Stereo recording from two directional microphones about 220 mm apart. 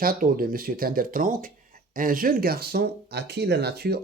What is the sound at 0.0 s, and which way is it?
Speech, 40° right (ahead or behind).